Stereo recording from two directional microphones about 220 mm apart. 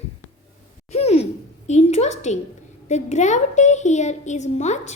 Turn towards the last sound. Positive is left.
turn(degrees=30)  # may be behind; listen again after turning